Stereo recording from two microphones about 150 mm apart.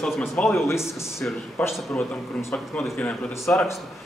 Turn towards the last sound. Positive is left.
turn(degrees=10)  # may be behind; listen again after turning